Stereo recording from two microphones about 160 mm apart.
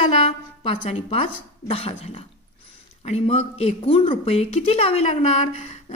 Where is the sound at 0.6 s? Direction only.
35° left (ahead or behind).